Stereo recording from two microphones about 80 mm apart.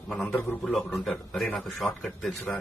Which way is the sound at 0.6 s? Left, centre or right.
Centre.